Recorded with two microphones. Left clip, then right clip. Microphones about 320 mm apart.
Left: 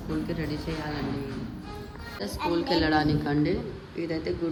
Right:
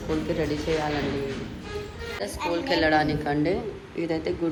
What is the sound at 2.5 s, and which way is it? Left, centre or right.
Speech, centre.